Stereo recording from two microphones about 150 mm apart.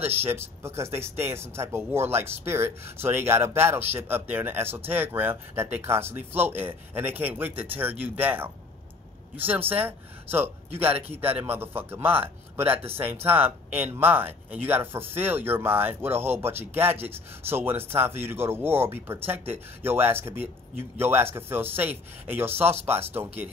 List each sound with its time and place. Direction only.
0.0 s speech: 15° right (ahead or behind)